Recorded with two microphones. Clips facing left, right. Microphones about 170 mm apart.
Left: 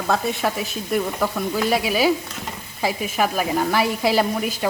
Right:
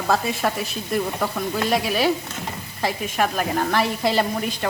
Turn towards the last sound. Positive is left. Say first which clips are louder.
# left 2 dB
turn(degrees=5)  # may be behind; listen again after turning